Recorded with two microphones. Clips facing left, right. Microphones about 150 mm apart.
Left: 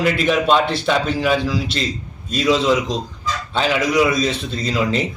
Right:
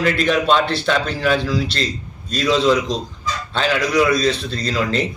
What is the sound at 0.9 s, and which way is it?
A man's voice, 10° left (ahead or behind).